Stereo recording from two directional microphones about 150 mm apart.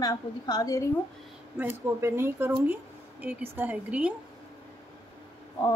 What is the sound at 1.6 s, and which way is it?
Speech, 15° right (ahead or behind).